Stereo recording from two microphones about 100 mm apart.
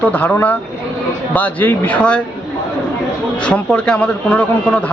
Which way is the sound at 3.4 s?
10° left (ahead or behind).